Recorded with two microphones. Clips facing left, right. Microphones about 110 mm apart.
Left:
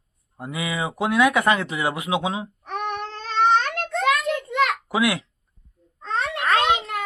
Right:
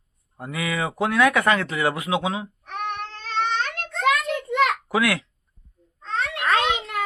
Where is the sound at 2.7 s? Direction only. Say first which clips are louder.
Left 2 dB; 35° left (ahead or behind).